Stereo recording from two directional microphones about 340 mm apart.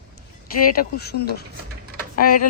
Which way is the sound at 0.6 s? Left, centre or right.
Left.